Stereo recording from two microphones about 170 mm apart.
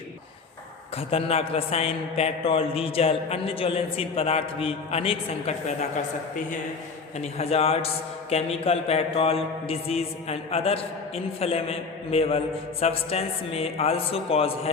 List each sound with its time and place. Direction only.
0.9 s a man's voice: 35° left (ahead or behind)
7.2 s a man's voice: 35° left (ahead or behind)